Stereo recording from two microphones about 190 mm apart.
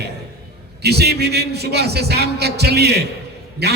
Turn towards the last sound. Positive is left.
turn(degrees=-60)  # may be behind; listen again after turning